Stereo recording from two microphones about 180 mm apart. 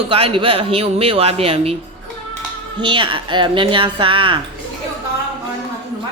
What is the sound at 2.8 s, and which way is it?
Speech, 25° right (ahead or behind).